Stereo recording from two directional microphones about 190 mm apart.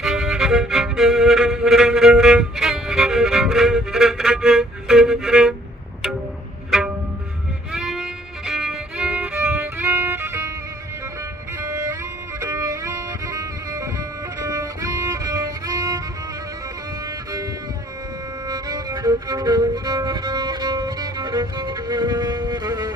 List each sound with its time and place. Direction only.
0.0 s music: centre (ahead or behind)
7.7 s music: centre (ahead or behind)
11.6 s music: 15° right (ahead or behind)
18.5 s music: 20° right (ahead or behind)